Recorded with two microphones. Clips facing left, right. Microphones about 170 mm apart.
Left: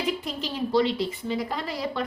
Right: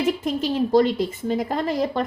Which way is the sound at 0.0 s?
50° right (ahead or behind).